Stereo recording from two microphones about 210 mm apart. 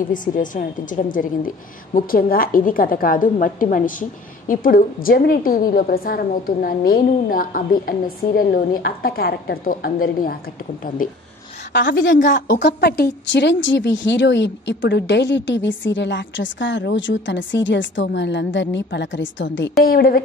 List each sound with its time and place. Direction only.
0.1 s a woman's voice: 40° left (ahead or behind)
11.7 s speech: 55° left (ahead or behind)
12.2 s a woman's voice: 35° left (ahead or behind)
12.5 s speech: 50° left (ahead or behind)
19.8 s a woman's voice: 45° left (ahead or behind)